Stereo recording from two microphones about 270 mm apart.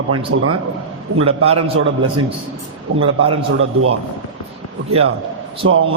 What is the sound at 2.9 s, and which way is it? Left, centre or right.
A man's voice, right.